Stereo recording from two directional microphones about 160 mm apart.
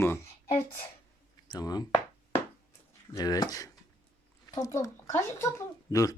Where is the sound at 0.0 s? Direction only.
15° left (ahead or behind).